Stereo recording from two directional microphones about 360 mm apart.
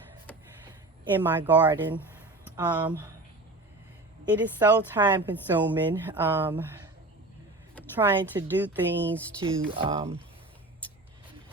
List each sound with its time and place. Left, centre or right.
1.2 s a woman's voice: centre
4.3 s a woman's voice: centre
9.7 s speech: centre